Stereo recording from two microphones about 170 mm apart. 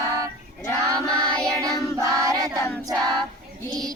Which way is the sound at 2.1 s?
20° right (ahead or behind).